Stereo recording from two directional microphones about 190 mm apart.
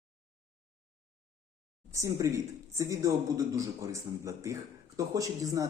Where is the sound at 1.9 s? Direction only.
15° right (ahead or behind).